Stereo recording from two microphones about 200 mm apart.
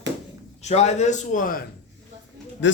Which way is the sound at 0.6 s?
35° left (ahead or behind).